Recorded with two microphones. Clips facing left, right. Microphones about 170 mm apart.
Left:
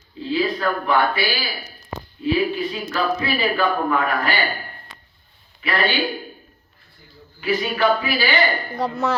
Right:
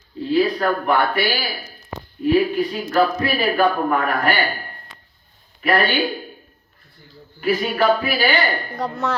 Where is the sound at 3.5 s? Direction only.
45° right (ahead or behind).